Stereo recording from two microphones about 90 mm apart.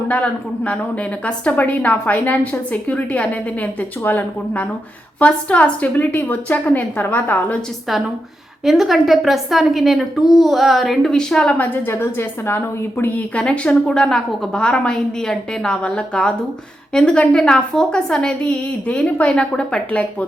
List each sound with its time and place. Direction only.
0.1 s a woman's voice: 15° left (ahead or behind)
7.9 s a woman's voice: centre (ahead or behind)
11.5 s a woman's voice: 20° left (ahead or behind)
13.3 s a woman's voice: 10° left (ahead or behind)